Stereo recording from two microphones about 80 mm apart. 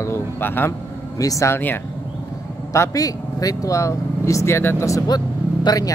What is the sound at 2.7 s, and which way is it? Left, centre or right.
Speech, left.